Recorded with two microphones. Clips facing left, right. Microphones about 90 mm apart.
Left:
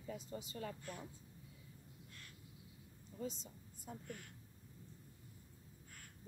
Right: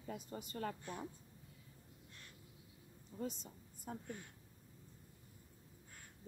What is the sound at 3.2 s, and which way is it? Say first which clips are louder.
Speech: right 1 dB; 55° right (ahead or behind).